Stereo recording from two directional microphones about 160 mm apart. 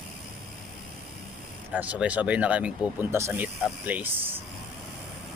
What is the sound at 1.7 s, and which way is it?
Speech, 10° right (ahead or behind).